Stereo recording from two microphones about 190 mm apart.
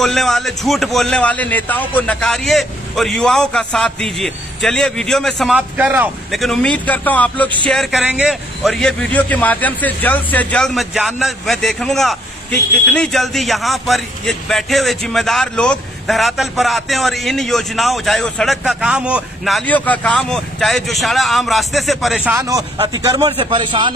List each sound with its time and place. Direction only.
0.0 s a man's voice: centre (ahead or behind)
22.4 s speech: 20° right (ahead or behind)